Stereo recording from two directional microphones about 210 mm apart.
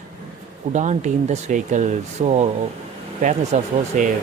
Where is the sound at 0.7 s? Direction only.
35° right (ahead or behind).